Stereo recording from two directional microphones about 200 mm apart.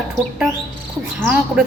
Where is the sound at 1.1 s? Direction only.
5° right (ahead or behind).